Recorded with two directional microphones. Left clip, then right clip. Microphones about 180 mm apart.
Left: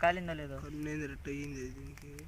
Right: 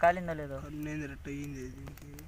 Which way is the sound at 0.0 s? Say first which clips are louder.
Right 4 dB; 30° right (ahead or behind).